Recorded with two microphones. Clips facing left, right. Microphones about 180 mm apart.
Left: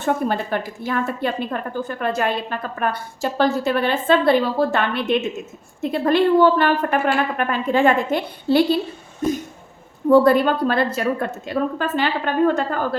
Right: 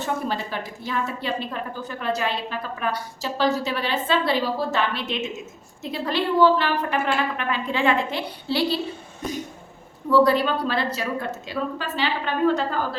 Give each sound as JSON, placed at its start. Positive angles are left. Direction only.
{"t": 0.0, "sound": "a woman's voice", "side_deg": 55}
{"t": 10.1, "sound": "a woman's voice", "side_deg": 50}